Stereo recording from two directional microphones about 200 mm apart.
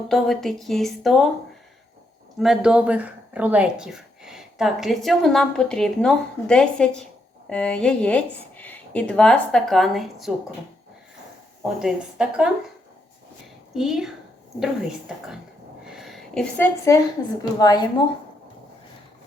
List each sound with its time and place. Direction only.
0.1 s speech: centre (ahead or behind)
2.4 s speech: centre (ahead or behind)
11.6 s speech: 5° right (ahead or behind)
13.7 s speech: centre (ahead or behind)
15.9 s a sound: centre (ahead or behind)
17.6 s speech: 20° left (ahead or behind)